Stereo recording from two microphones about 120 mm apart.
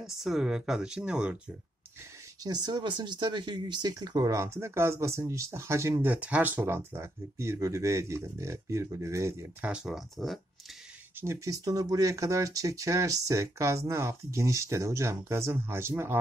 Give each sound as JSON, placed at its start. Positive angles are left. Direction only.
{"t": 0.0, "sound": "speech", "side_deg": -5}
{"t": 2.4, "sound": "speech", "side_deg": -35}
{"t": 9.6, "sound": "speech", "side_deg": -10}
{"t": 11.1, "sound": "speech", "side_deg": -25}